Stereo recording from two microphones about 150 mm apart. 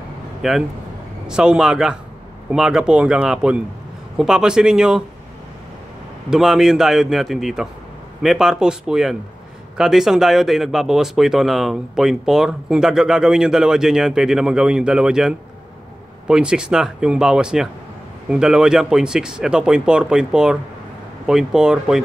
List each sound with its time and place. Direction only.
0.4 s speech: centre (ahead or behind)
6.3 s speech: 5° right (ahead or behind)